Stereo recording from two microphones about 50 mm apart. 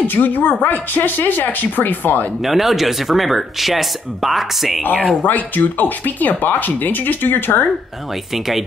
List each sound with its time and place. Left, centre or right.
0.0 s speech: left
2.4 s speech: centre
5.2 s speech: left